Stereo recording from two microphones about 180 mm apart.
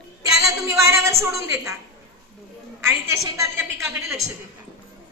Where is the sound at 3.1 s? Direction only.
15° right (ahead or behind).